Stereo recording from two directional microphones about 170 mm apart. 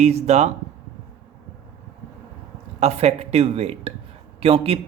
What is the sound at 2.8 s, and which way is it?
Speech, 40° right (ahead or behind).